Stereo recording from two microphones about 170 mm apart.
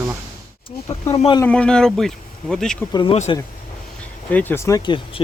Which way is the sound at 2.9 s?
25° left (ahead or behind).